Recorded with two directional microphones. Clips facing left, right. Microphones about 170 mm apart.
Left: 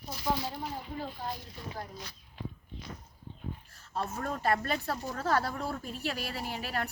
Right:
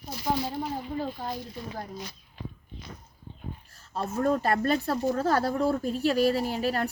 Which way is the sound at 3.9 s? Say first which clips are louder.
Right 9 dB; 35° right (ahead or behind).